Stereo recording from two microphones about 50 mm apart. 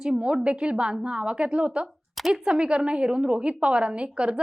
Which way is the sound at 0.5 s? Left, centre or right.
Centre.